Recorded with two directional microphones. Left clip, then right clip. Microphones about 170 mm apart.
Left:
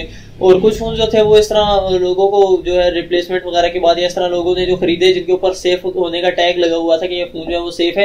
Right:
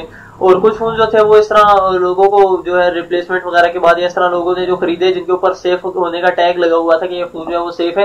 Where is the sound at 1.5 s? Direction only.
20° right (ahead or behind).